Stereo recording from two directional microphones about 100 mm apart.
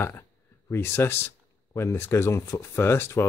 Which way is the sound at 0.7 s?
25° left (ahead or behind).